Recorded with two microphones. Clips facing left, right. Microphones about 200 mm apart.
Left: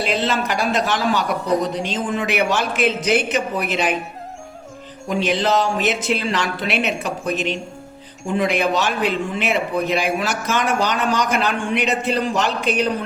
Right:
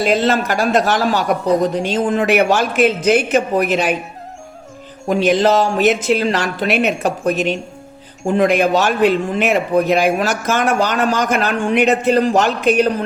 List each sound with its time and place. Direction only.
0.0 s a man's voice: 40° right (ahead or behind)
5.0 s a man's voice: 45° right (ahead or behind)